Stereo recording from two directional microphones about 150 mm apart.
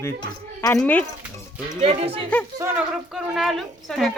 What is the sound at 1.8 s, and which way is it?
Speech, 40° right (ahead or behind).